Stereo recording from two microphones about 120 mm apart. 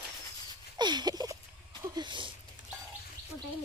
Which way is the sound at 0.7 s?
35° right (ahead or behind).